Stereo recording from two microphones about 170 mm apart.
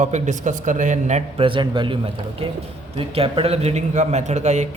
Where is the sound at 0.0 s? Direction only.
45° right (ahead or behind); by 2.0 s 30° right (ahead or behind).